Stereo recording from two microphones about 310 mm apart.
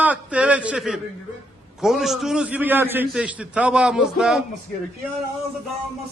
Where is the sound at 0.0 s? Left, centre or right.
Centre.